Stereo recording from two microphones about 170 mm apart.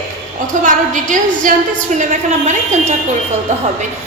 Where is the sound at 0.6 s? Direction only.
50° right (ahead or behind).